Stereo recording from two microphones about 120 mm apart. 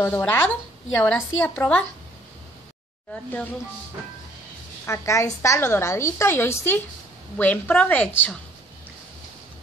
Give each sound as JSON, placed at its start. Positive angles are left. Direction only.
{"t": 0.0, "sound": "a woman's voice", "side_deg": 15}
{"t": 3.1, "sound": "a woman's voice", "side_deg": 10}
{"t": 4.8, "sound": "a woman's voice", "side_deg": 25}